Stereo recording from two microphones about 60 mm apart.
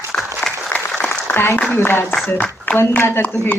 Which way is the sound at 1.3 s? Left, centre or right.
Left.